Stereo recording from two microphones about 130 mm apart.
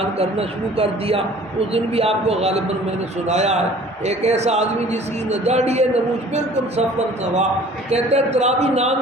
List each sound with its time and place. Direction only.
0.2 s a man's voice: 50° right (ahead or behind)
7.9 s a man's voice: 55° right (ahead or behind)